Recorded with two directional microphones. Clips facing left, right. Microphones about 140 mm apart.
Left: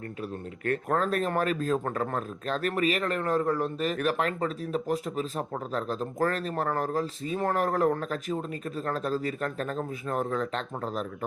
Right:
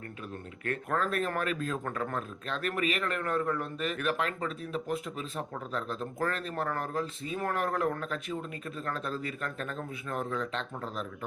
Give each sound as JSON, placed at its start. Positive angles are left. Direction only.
{"t": 0.6, "sound": "speech", "side_deg": 40}